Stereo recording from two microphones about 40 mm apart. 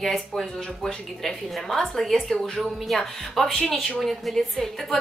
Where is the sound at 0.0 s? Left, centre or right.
Centre.